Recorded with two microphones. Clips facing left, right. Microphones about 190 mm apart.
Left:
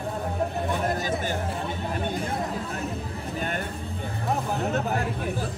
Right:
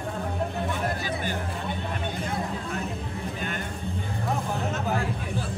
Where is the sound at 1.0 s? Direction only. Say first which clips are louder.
Left 3 dB; 45° left (ahead or behind).